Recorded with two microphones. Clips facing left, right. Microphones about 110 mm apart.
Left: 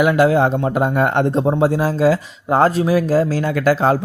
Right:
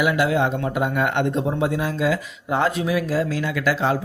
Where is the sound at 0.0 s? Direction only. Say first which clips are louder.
Left 6 dB; 40° left (ahead or behind).